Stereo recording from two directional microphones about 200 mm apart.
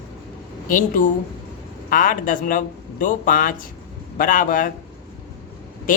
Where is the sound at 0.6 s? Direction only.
40° left (ahead or behind).